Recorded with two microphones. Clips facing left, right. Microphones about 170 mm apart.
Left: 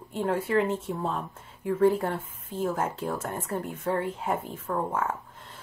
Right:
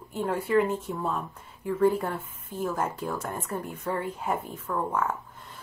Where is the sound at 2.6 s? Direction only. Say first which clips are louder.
Left 1 dB; 50° left (ahead or behind).